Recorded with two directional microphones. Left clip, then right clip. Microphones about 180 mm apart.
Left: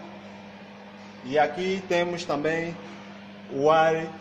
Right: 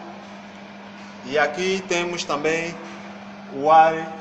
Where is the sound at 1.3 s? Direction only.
35° left (ahead or behind).